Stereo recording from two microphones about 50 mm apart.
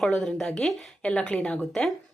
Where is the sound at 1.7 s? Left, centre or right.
Centre.